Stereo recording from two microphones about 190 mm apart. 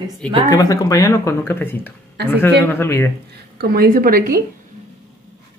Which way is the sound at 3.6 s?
50° right (ahead or behind).